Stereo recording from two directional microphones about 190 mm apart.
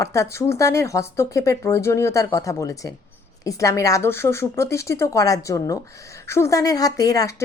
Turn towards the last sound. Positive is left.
turn(degrees=20)  # may be behind; listen again after turning